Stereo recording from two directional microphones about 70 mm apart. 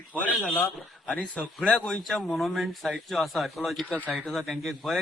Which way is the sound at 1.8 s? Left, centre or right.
Centre.